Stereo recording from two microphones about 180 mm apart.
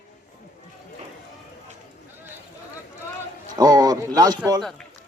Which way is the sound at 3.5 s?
20° right (ahead or behind).